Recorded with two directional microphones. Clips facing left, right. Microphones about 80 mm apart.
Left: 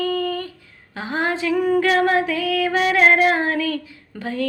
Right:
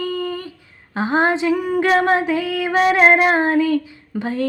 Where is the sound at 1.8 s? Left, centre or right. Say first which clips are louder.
Right 2 dB; right.